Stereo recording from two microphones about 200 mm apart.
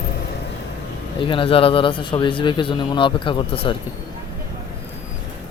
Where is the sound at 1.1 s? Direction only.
25° left (ahead or behind).